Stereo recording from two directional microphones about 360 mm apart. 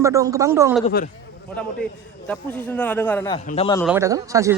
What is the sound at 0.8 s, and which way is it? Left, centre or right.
Speech, left.